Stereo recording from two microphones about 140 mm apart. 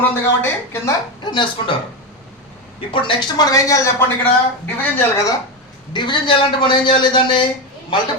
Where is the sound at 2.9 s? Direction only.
35° left (ahead or behind).